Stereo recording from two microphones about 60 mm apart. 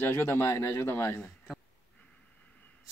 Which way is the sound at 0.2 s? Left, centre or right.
Left.